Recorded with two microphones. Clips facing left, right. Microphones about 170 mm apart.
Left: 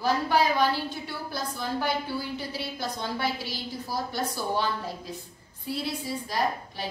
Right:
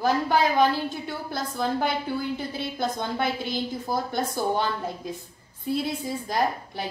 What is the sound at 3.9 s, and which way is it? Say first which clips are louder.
Speech: right 2 dB; 50° right (ahead or behind).